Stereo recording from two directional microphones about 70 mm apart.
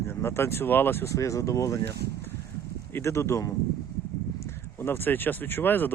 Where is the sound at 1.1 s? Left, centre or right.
Left.